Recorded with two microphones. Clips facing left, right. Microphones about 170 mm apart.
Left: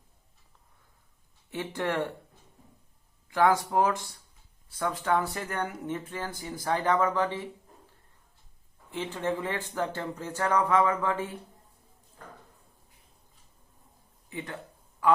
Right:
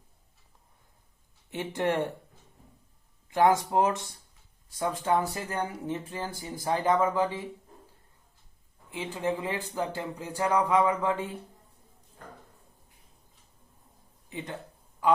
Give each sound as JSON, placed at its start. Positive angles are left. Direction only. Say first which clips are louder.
{"t": 1.5, "sound": "speech", "louder": "right 2 dB", "side_deg": -20}
{"t": 3.2, "sound": "speech", "louder": "right 1 dB", "side_deg": -20}
{"t": 5.5, "sound": "speech", "louder": "right 1 dB", "side_deg": -35}
{"t": 6.1, "sound": "speech", "louder": "even", "side_deg": -20}
{"t": 8.9, "sound": "speech", "louder": "even", "side_deg": -10}
{"t": 14.3, "sound": "speech", "louder": "even", "side_deg": -20}